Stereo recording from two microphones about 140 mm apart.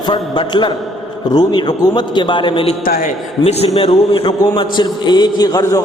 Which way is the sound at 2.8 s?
90° left.